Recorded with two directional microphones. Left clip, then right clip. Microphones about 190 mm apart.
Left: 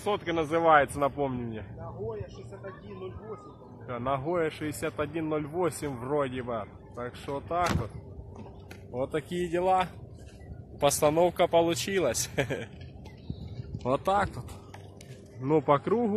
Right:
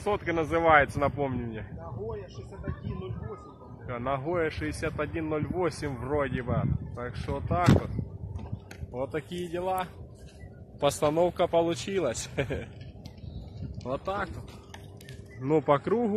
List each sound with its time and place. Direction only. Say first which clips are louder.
0.3 s a man's voice: even; 5° right (ahead or behind)
1.8 s speech: left 1 dB; 40° right (ahead or behind)
3.8 s a man's voice: left 1 dB; centre (ahead or behind)
8.9 s speech: left 2 dB; 25° left (ahead or behind)
9.3 s speech: left 9 dB; 50° left (ahead or behind)
10.8 s a man's voice: left 1 dB; centre (ahead or behind)
13.6 s a sound: left 5 dB; 55° left (ahead or behind)
15.4 s a man's voice: even; centre (ahead or behind)